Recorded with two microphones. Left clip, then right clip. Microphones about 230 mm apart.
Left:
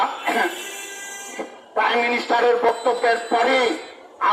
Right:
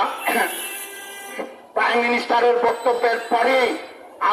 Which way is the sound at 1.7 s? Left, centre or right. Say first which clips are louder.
Right 1 dB; right.